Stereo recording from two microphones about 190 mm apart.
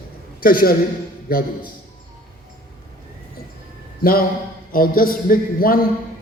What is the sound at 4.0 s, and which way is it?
A man's voice, 50° left (ahead or behind).